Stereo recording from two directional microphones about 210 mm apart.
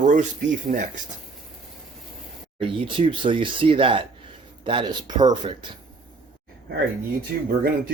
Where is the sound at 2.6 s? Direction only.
25° right (ahead or behind).